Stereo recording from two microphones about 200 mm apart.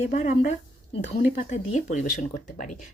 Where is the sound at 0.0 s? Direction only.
35° left (ahead or behind).